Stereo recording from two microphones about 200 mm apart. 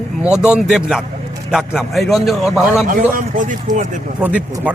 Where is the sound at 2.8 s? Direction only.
40° right (ahead or behind).